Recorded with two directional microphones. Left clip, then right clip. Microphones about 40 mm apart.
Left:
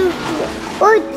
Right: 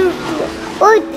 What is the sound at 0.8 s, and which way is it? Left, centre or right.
Speech, right.